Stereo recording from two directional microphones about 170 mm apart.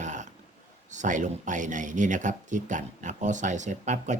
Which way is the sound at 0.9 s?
45° right (ahead or behind).